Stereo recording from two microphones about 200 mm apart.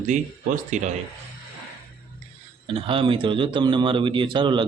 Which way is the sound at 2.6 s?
25° right (ahead or behind).